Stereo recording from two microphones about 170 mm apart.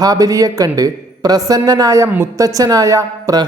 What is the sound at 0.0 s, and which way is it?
A woman's voice, 20° right (ahead or behind).